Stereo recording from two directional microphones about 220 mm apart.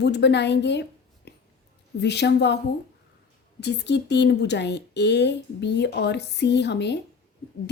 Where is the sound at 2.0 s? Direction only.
50° left (ahead or behind).